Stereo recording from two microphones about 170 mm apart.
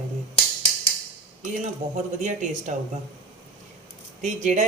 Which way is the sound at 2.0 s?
45° right (ahead or behind).